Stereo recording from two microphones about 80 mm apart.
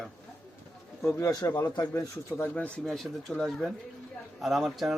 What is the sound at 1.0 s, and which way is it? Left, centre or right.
Speech, left.